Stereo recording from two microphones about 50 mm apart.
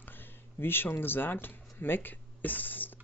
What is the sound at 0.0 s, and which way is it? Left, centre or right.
Speech, left.